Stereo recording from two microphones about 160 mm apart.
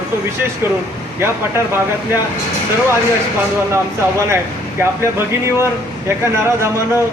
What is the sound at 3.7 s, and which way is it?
Speech, 15° right (ahead or behind).